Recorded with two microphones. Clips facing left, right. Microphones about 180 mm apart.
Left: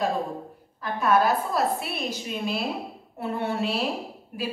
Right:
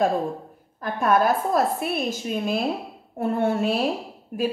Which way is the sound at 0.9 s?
50° right (ahead or behind).